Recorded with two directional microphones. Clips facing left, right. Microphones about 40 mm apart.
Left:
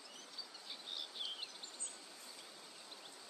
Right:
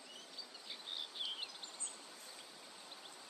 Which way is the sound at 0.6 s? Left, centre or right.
Centre.